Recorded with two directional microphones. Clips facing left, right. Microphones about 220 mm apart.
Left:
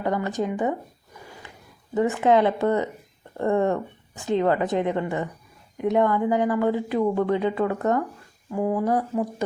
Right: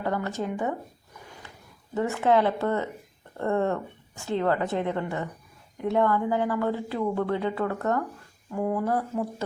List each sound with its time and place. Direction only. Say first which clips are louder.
0.0 s speech: left 4 dB; 15° left (ahead or behind)
2.0 s speech: left 3 dB; 15° left (ahead or behind)
8.4 s speech: left 3 dB; 5° left (ahead or behind)